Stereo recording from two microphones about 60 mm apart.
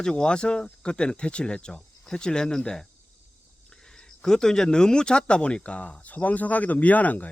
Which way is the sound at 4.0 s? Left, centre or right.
Centre.